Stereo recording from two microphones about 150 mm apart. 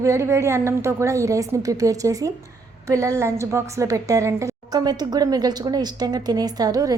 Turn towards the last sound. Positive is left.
turn(degrees=-25)  # may be behind; listen again after turning